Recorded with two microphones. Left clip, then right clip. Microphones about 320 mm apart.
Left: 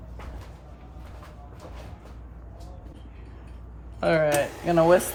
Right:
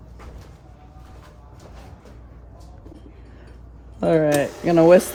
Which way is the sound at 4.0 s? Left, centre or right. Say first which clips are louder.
Right 4 dB; centre.